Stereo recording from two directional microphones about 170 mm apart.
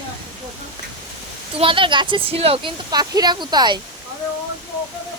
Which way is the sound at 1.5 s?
30° right (ahead or behind).